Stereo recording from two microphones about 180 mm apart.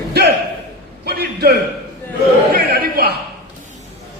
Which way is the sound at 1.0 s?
65° right (ahead or behind).